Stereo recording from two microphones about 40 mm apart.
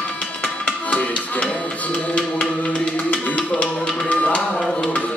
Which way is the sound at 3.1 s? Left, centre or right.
Left.